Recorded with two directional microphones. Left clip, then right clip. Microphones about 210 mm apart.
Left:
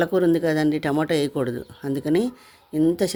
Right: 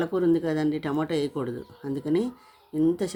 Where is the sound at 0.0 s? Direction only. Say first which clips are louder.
Left 5 dB; 40° left (ahead or behind).